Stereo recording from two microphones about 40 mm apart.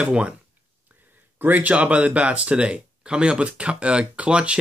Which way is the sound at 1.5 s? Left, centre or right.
Right.